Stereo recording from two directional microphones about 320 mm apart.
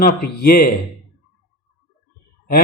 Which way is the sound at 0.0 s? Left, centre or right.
Left.